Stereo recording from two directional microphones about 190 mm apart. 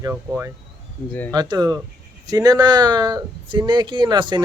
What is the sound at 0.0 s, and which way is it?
A man's voice, 15° right (ahead or behind).